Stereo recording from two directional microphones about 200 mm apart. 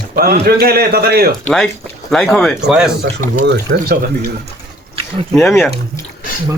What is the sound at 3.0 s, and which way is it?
Speech, 55° right (ahead or behind).